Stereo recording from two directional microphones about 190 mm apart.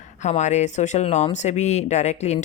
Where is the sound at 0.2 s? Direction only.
40° left (ahead or behind).